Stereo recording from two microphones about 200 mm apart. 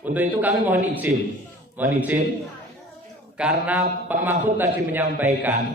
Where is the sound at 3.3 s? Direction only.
5° right (ahead or behind).